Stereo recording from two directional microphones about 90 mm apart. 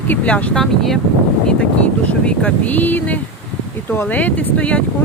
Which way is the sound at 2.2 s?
15° left (ahead or behind).